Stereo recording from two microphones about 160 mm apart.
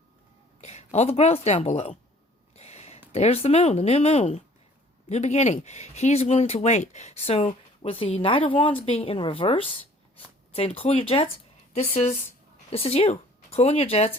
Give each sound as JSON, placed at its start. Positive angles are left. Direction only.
{"t": 0.6, "sound": "speech", "side_deg": 45}
{"t": 2.6, "sound": "a sound", "side_deg": 40}
{"t": 3.1, "sound": "speech", "side_deg": 40}